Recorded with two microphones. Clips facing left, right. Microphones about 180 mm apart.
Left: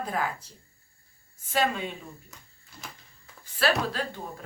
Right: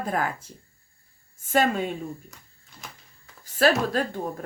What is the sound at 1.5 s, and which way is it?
Speech, 45° right (ahead or behind).